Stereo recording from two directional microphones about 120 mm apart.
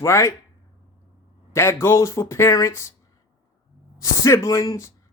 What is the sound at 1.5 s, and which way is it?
Speech, 20° left (ahead or behind).